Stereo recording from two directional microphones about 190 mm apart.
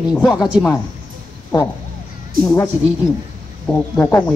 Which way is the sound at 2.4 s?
15° left (ahead or behind).